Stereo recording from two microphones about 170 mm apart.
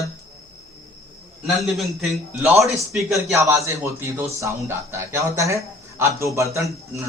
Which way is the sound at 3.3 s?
15° right (ahead or behind).